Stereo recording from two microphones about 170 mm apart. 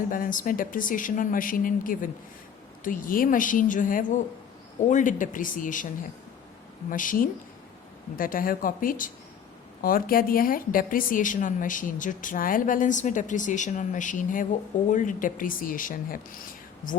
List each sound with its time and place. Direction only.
0.1 s a woman's voice: 50° left (ahead or behind)
6.9 s a woman's voice: 50° left (ahead or behind)